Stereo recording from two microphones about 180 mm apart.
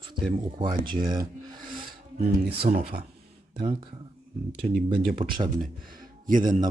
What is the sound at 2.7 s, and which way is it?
Speech, 40° right (ahead or behind).